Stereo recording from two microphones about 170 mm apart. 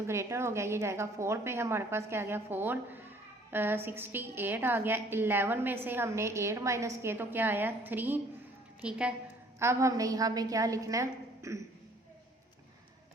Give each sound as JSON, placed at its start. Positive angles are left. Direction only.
{"t": 0.1, "sound": "a woman's voice", "side_deg": -15}
{"t": 9.6, "sound": "a woman's voice", "side_deg": -15}